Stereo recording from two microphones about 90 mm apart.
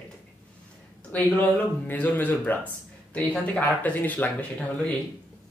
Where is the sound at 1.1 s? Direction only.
20° left (ahead or behind).